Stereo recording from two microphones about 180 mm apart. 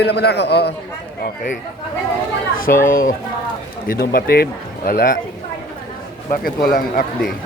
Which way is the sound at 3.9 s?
55° left (ahead or behind).